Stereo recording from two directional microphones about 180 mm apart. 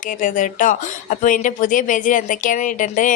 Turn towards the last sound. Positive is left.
turn(degrees=45)  # may be behind; listen again after turning